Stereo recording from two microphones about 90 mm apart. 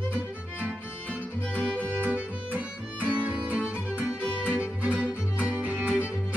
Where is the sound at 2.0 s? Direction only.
15° right (ahead or behind).